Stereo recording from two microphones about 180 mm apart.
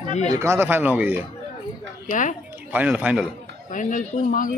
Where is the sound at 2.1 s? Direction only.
45° left (ahead or behind).